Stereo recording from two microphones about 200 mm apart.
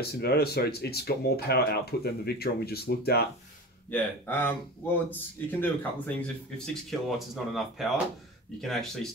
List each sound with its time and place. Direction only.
0.0 s speech: 50° left (ahead or behind)
3.9 s speech: 10° left (ahead or behind)